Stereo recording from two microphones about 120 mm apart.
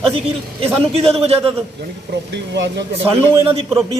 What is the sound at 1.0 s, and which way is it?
Speech, 55° right (ahead or behind).